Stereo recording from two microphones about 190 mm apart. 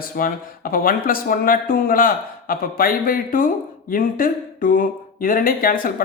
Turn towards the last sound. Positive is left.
turn(degrees=50)  # may be behind; listen again after turning